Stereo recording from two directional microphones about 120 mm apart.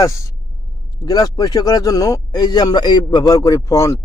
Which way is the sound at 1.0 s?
30° left (ahead or behind).